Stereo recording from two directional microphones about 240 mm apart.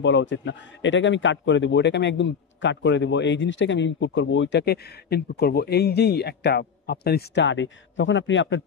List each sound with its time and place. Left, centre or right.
0.0 s a man's voice: left